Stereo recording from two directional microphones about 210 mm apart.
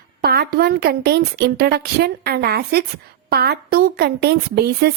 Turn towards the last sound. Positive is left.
turn(degrees=-50)  # may be behind; listen again after turning